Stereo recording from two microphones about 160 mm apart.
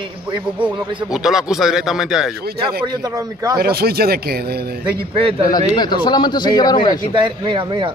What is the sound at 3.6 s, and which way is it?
A man's voice, 75° right (ahead or behind).